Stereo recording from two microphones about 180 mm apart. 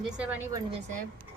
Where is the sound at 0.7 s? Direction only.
45° right (ahead or behind).